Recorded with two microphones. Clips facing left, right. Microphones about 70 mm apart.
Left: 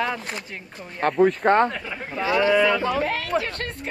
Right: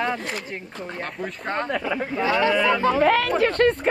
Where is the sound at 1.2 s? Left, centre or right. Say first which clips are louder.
Left 12 dB; left.